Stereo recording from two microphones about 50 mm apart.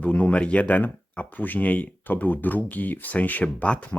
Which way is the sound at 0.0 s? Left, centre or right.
Left.